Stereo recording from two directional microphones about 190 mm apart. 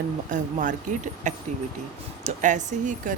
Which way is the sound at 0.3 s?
45° right (ahead or behind).